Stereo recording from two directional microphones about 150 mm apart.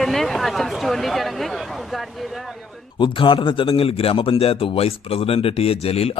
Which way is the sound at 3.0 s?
35° left (ahead or behind).